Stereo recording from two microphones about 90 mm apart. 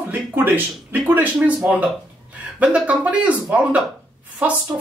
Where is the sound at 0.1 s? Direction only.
25° right (ahead or behind).